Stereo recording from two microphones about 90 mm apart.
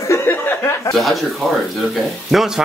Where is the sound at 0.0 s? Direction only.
30° left (ahead or behind).